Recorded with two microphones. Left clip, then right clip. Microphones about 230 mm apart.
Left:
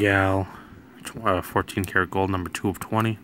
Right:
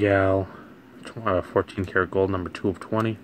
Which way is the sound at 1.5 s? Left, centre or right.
Left.